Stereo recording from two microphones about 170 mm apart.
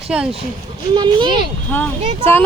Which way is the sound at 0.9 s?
25° right (ahead or behind).